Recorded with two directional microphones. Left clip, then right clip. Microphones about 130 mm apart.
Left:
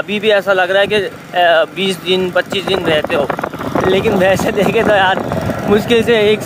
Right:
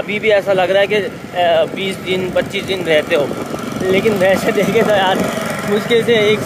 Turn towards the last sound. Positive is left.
turn(degrees=25)  # may be behind; listen again after turning